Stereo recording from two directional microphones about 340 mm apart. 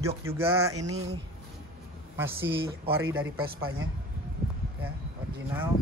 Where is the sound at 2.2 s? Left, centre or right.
Centre.